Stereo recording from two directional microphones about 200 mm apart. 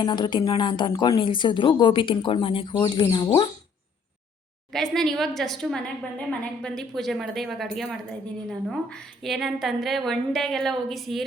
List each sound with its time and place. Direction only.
0.0 s speech: 20° left (ahead or behind)
4.7 s a woman's voice: centre (ahead or behind)